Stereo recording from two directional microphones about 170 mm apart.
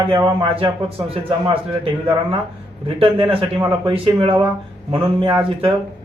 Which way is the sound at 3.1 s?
30° right (ahead or behind).